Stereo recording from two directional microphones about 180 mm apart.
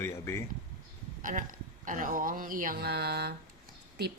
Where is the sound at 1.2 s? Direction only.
45° right (ahead or behind); by 3.3 s 65° right (ahead or behind).